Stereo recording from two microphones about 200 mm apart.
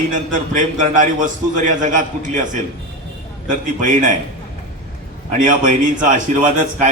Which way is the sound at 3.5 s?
40° right (ahead or behind).